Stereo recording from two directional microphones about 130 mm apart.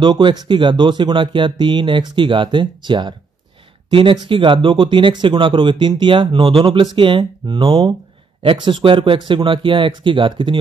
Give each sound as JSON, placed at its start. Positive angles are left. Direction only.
{"t": 0.0, "sound": "speech", "side_deg": -35}